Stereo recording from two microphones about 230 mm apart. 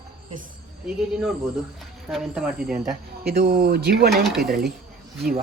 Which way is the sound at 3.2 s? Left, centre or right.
Right.